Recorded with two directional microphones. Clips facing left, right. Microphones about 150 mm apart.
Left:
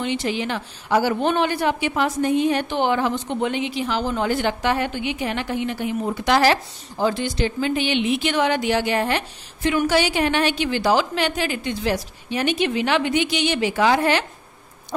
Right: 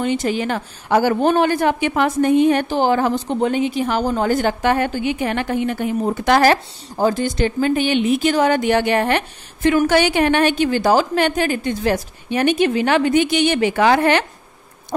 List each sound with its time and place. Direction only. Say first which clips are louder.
0.0 s a woman's voice: right 4 dB; 45° right (ahead or behind)
2.7 s a woman's voice: right 4 dB; 40° right (ahead or behind); by 14.2 s 60° right (ahead or behind)